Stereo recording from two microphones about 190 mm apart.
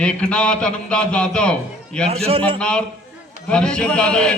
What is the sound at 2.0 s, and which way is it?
Speech, 30° right (ahead or behind).